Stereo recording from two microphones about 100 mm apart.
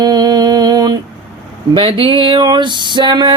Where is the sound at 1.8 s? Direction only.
65° right (ahead or behind).